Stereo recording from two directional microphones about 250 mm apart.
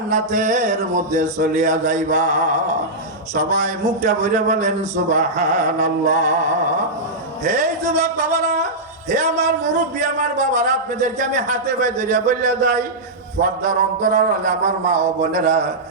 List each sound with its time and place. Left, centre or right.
0.1 s a man's voice: right